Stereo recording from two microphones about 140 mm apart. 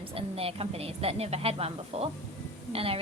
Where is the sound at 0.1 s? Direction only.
45° right (ahead or behind).